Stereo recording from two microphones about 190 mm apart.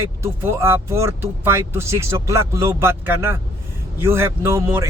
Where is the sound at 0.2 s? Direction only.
15° right (ahead or behind).